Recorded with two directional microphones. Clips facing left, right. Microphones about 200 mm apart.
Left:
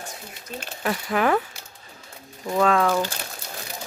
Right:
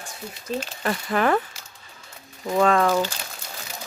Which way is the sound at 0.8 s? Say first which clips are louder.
Left 1 dB; 5° left (ahead or behind).